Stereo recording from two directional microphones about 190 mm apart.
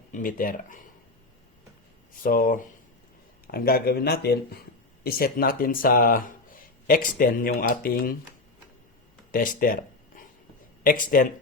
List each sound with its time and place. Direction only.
0.1 s speech: 45° left (ahead or behind)
2.2 s speech: 45° left (ahead or behind)
9.3 s speech: 45° left (ahead or behind)
10.8 s speech: 45° left (ahead or behind)